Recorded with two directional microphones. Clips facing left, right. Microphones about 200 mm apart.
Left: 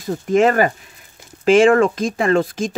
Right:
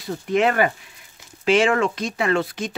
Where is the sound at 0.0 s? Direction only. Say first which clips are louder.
Left 5 dB; 45° left (ahead or behind).